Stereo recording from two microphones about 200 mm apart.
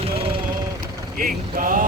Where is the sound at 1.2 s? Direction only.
45° right (ahead or behind).